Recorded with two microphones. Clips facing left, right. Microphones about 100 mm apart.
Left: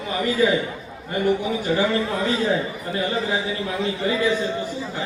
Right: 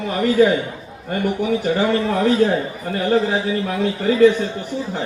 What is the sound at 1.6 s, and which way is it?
Speech, 65° right (ahead or behind).